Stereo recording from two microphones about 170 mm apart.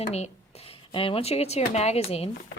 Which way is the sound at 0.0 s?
40° left (ahead or behind).